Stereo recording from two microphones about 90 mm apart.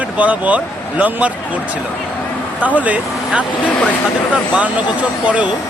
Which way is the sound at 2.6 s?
15° right (ahead or behind).